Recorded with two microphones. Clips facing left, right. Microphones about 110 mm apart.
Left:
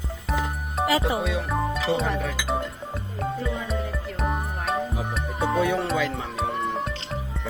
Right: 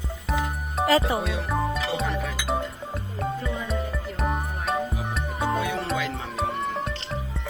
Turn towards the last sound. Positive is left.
turn(degrees=0)  # may be behind; listen again after turning